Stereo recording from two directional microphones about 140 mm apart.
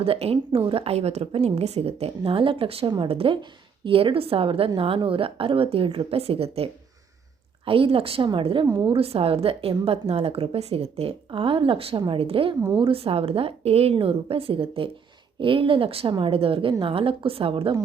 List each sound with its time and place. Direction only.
0.0 s a woman's voice: 45° right (ahead or behind)
8.6 s a woman's voice: 25° right (ahead or behind)
8.9 s a woman's voice: 45° right (ahead or behind)